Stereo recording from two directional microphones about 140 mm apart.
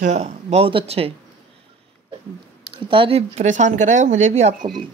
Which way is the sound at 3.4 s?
55° right (ahead or behind).